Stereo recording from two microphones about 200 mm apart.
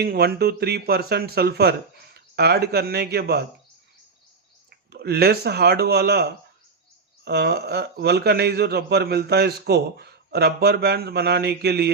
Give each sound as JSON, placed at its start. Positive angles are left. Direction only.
{"t": 0.0, "sound": "speech", "side_deg": -50}
{"t": 4.9, "sound": "a man's voice", "side_deg": -55}